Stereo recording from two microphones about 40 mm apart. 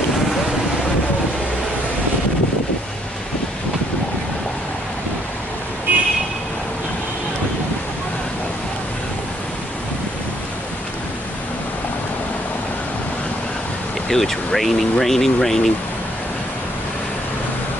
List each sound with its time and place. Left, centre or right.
5.9 s vehicle: right
14.0 s speech: centre